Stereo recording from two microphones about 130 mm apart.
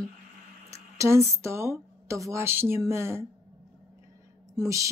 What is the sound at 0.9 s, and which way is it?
Speech, 20° right (ahead or behind).